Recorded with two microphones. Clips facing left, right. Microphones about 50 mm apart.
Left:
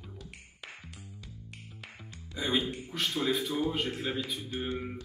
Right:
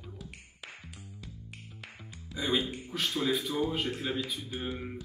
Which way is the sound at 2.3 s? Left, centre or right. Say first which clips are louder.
Even; centre.